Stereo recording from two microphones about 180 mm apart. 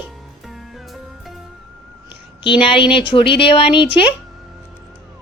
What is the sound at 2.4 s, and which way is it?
A woman's voice, 30° left (ahead or behind).